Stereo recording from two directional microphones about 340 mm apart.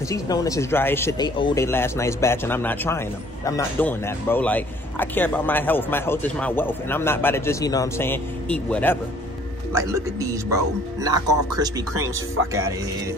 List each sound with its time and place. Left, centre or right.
0.1 s a man's voice: centre
9.8 s speech: centre
12.4 s speech: right